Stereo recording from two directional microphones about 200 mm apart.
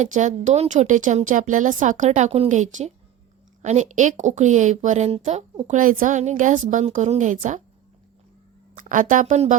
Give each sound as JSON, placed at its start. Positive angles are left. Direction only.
{"t": 0.0, "sound": "a woman's voice", "side_deg": -40}
{"t": 8.7, "sound": "a woman's voice", "side_deg": -40}